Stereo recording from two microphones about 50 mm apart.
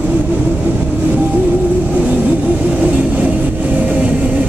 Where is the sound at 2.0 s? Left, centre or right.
Right.